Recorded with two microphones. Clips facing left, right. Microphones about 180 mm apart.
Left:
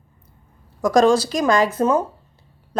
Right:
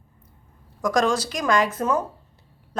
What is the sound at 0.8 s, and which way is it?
Speech, 30° left (ahead or behind).